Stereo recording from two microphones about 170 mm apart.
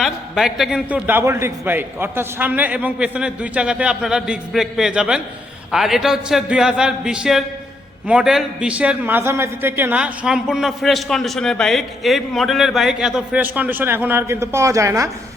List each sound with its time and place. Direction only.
0.0 s a man's voice: centre (ahead or behind); by 15.1 s 20° right (ahead or behind)